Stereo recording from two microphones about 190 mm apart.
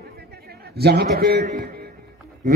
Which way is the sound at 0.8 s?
55° right (ahead or behind).